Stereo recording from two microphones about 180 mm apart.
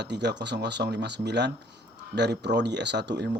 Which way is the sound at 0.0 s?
70° right (ahead or behind).